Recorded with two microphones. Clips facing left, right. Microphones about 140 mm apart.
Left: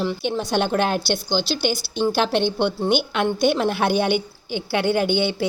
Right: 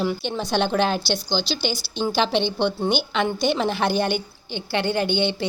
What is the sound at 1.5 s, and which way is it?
Speech, 55° left (ahead or behind).